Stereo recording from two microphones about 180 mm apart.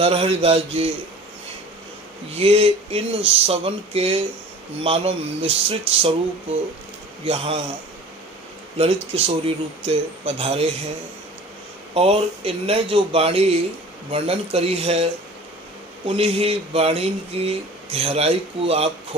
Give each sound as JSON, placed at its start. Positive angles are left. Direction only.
{"t": 0.0, "sound": "speech", "side_deg": -35}
{"t": 2.3, "sound": "speech", "side_deg": -35}
{"t": 7.3, "sound": "speech", "side_deg": -30}
{"t": 8.8, "sound": "speech", "side_deg": -30}
{"t": 11.9, "sound": "speech", "side_deg": -35}